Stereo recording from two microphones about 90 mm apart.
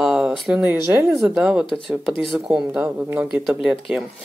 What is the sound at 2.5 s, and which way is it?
Speech, 15° right (ahead or behind).